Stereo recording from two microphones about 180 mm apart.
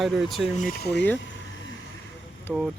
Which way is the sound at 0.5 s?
50° left (ahead or behind).